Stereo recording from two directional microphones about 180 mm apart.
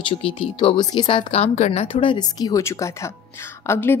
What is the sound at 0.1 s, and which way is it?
Speech, 30° left (ahead or behind).